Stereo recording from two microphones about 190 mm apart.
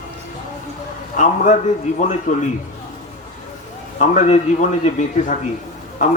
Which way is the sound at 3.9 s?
40° left (ahead or behind).